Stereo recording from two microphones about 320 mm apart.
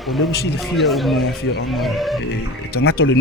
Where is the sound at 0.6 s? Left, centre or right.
Centre.